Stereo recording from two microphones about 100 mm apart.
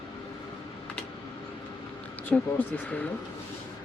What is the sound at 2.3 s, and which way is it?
Speech, 10° left (ahead or behind).